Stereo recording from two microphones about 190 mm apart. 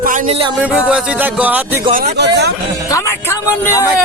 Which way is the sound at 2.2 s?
60° right (ahead or behind).